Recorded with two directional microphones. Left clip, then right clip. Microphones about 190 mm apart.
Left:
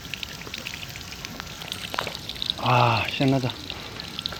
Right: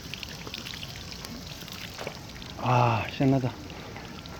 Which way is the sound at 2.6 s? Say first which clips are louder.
Left 4 dB; 5° left (ahead or behind).